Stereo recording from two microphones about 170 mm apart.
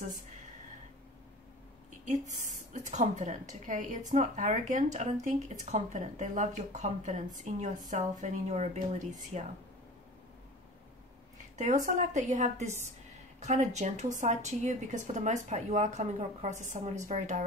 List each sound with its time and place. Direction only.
1.9 s a woman's voice: 45° right (ahead or behind)
11.5 s a woman's voice: 45° right (ahead or behind)